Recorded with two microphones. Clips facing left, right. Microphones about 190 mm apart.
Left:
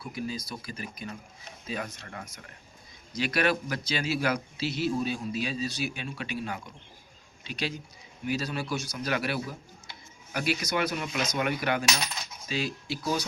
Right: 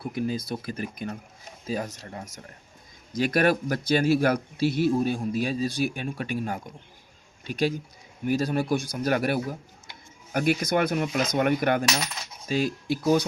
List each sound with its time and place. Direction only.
0.0 s a man's voice: 50° right (ahead or behind)
1.6 s speech: 35° right (ahead or behind)
3.2 s a man's voice: 50° right (ahead or behind)